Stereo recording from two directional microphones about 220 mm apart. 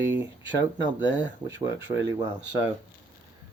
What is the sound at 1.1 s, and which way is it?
Speech, 15° right (ahead or behind).